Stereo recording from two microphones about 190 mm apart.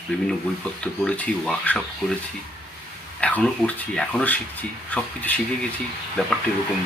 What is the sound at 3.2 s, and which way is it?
Speech, 5° left (ahead or behind).